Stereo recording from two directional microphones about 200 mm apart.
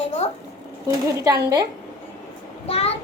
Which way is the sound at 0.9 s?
15° right (ahead or behind).